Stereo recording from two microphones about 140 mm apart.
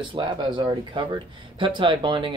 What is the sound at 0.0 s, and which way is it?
Speech, 35° right (ahead or behind).